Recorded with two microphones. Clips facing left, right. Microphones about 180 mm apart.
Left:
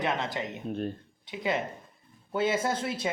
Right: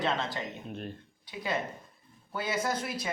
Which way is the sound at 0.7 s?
40° left (ahead or behind).